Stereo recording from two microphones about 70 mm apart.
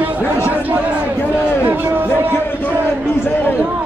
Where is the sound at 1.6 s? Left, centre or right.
Right.